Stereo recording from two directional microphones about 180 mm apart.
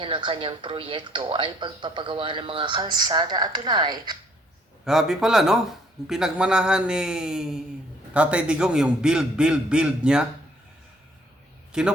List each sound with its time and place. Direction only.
0.0 s speech: 30° right (ahead or behind)
4.9 s a man's voice: centre (ahead or behind)
11.7 s a man's voice: 5° right (ahead or behind)